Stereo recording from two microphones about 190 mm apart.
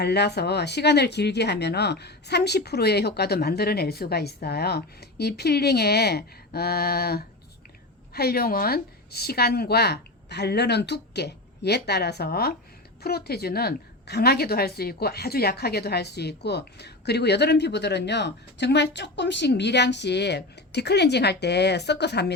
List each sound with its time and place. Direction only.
0.0 s a woman's voice: 60° left (ahead or behind)